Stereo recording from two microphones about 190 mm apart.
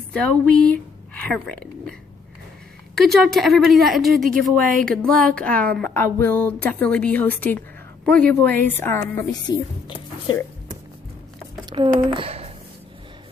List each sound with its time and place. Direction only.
0.1 s a woman's voice: 5° left (ahead or behind)
3.0 s a woman's voice: centre (ahead or behind); by 10.4 s 25° left (ahead or behind)
11.7 s speech: 25° right (ahead or behind)